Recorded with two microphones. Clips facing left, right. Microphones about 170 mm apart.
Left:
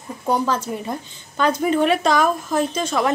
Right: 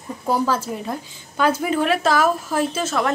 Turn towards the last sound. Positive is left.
turn(degrees=0)  # may be behind; listen again after turning